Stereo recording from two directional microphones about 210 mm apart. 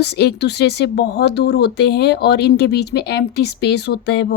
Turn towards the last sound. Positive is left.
turn(degrees=55)  # may be behind; listen again after turning